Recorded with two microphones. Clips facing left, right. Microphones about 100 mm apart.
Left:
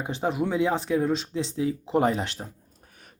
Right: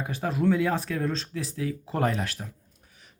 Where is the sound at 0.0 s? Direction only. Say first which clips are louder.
Even; 25° left (ahead or behind).